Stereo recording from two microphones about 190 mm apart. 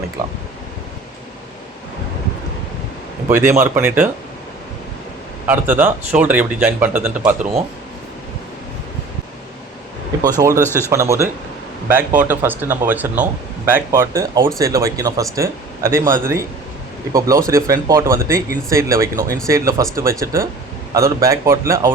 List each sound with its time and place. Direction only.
3.2 s speech: 10° right (ahead or behind)
5.5 s speech: 10° right (ahead or behind)
10.2 s speech: 20° right (ahead or behind)
10.6 s speech: 10° left (ahead or behind)
10.8 s speech: 15° right (ahead or behind)